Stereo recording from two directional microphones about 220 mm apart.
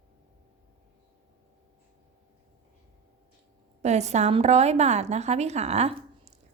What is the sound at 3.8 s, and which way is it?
A woman's voice, 30° right (ahead or behind).